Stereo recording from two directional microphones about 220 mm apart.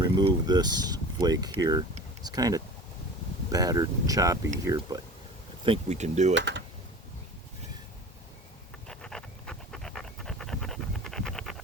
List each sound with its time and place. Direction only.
0.0 s speech: 20° right (ahead or behind)
5.6 s speech: 25° right (ahead or behind)
6.3 s speech: 55° right (ahead or behind)
8.9 s a sound: centre (ahead or behind)